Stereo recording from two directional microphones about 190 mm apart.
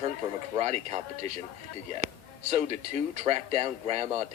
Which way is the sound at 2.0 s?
35° right (ahead or behind).